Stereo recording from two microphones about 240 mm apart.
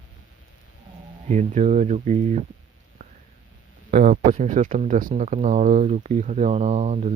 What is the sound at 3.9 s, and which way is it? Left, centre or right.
Speech, right.